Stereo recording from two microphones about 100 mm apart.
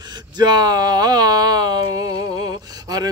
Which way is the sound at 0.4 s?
45° right (ahead or behind).